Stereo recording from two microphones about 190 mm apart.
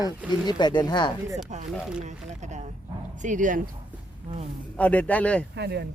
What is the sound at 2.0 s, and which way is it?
Speech, 40° right (ahead or behind).